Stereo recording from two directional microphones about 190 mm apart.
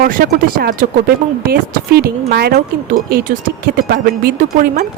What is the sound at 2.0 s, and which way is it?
A woman's voice, 55° right (ahead or behind).